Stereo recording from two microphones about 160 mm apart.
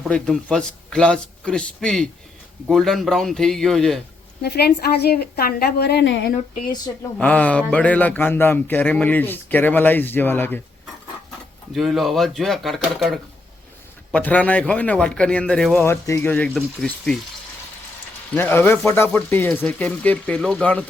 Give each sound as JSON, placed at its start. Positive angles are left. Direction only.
{"t": 0.5, "sound": "a man's voice", "side_deg": 5}
{"t": 4.4, "sound": "a woman's voice", "side_deg": 90}
{"t": 7.2, "sound": "speech", "side_deg": 10}
{"t": 11.7, "sound": "a man's voice", "side_deg": 0}
{"t": 18.3, "sound": "speech", "side_deg": 15}